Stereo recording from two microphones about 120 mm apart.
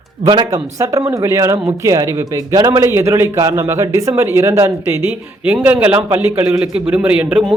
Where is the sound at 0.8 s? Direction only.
25° right (ahead or behind).